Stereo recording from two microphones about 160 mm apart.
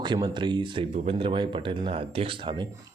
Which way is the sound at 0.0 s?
30° right (ahead or behind).